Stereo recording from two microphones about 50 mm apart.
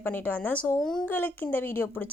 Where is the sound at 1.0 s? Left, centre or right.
Left.